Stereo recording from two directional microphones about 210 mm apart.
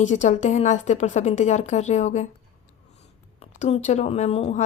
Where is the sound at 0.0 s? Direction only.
35° left (ahead or behind).